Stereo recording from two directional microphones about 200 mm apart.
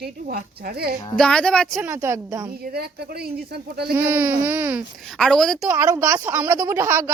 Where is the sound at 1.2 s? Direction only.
5° left (ahead or behind).